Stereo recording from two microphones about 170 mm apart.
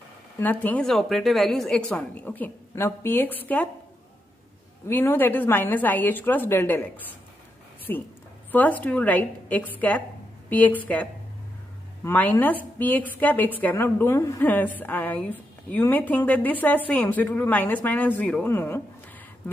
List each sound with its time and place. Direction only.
0.4 s a woman's voice: 10° left (ahead or behind)
4.8 s a woman's voice: 10° left (ahead or behind)
7.9 s a woman's voice: 10° left (ahead or behind)